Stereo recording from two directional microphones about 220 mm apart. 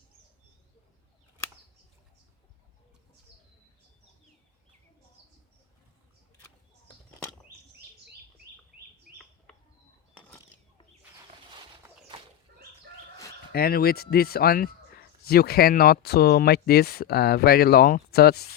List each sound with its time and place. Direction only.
13.5 s speech: 45° left (ahead or behind)